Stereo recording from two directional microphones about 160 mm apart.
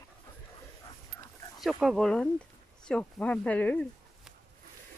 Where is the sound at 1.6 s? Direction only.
Centre (ahead or behind).